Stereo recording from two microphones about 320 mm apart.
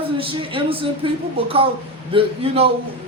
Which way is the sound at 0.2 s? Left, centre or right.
Centre.